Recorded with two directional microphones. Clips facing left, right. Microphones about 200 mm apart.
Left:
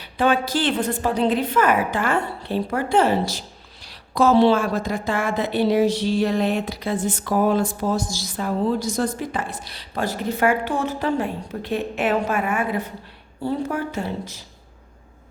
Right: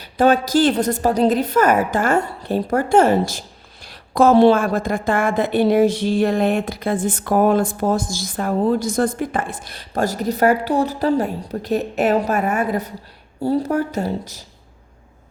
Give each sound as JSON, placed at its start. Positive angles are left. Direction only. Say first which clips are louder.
{"t": 0.0, "sound": "a woman's voice", "louder": "right 4 dB", "side_deg": -40}